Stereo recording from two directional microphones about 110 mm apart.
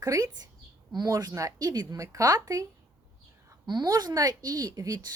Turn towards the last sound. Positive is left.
turn(degrees=-30)  # may be behind; listen again after turning